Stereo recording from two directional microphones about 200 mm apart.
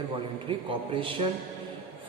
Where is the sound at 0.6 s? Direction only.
25° right (ahead or behind).